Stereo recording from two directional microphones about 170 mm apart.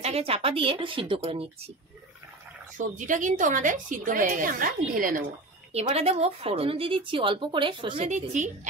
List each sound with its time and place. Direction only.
0.0 s speech: 35° right (ahead or behind)
2.8 s a woman's voice: 50° right (ahead or behind)
5.7 s speech: 35° right (ahead or behind)
8.1 s a woman's voice: 45° right (ahead or behind)